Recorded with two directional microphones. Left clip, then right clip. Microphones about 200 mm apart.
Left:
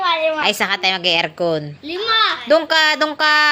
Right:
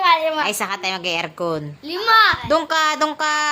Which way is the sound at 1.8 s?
30° right (ahead or behind).